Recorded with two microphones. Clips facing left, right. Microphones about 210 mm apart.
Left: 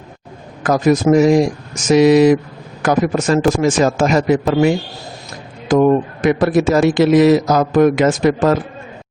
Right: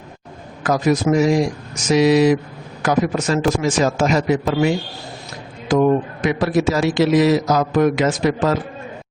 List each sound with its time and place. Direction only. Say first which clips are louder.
0.6 s a man's voice: left 4 dB; 50° left (ahead or behind)